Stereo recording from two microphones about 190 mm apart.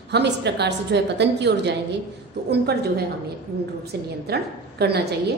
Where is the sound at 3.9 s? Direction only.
60° right (ahead or behind).